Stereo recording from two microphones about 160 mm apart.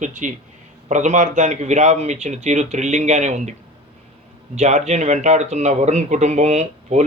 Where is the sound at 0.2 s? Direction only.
50° right (ahead or behind).